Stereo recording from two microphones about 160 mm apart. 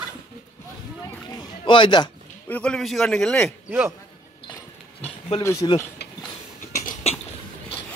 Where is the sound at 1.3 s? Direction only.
30° left (ahead or behind).